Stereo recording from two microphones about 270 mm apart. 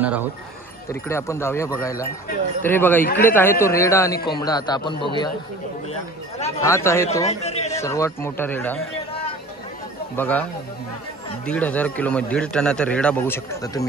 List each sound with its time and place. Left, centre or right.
0.8 s a man's voice: centre
6.6 s a man's voice: centre
7.2 s a man's voice: left
7.7 s a man's voice: centre
10.1 s a man's voice: centre
11.4 s speech: centre